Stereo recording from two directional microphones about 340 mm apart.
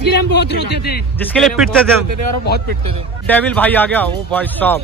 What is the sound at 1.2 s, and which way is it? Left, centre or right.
Speech, centre.